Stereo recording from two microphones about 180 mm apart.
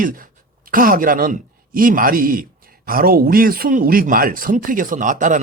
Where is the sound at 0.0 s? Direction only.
50° right (ahead or behind).